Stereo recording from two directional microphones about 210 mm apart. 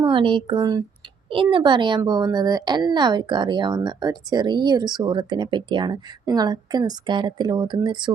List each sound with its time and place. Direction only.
0.0 s a woman's voice: 25° right (ahead or behind)